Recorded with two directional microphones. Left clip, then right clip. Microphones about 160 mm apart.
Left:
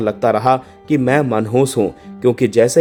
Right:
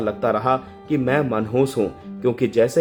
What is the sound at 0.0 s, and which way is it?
Speech, 50° left (ahead or behind).